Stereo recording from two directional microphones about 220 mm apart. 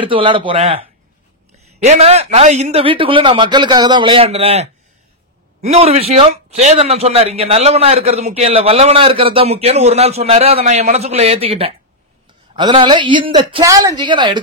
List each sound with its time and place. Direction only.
0.0 s speech: 25° right (ahead or behind)
1.9 s speech: 30° right (ahead or behind)